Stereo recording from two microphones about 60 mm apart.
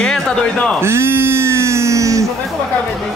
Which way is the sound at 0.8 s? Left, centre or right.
Right.